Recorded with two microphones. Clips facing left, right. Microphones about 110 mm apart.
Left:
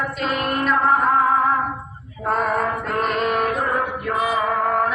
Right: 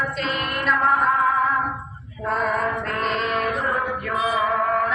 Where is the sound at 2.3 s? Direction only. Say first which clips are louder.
Left 2 dB; 45° left (ahead or behind).